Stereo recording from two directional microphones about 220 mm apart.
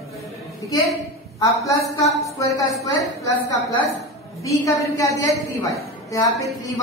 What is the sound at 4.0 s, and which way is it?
A woman's voice, 15° left (ahead or behind).